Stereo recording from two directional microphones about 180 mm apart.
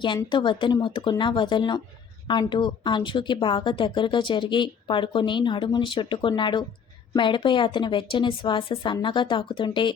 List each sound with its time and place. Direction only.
0.0 s speech: 25° left (ahead or behind)